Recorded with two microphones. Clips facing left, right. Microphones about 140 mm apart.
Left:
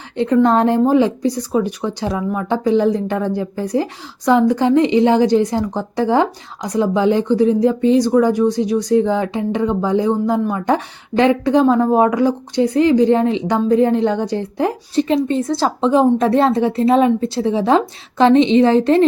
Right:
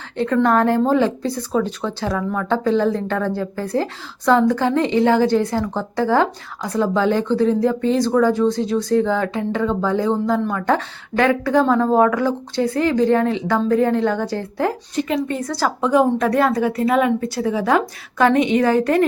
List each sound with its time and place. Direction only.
0.2 s a woman's voice: 15° left (ahead or behind)
14.9 s a woman's voice: 30° left (ahead or behind)